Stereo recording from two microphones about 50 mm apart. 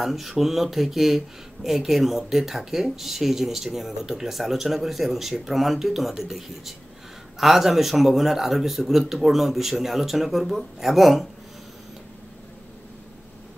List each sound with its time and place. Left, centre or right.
0.0 s speech: centre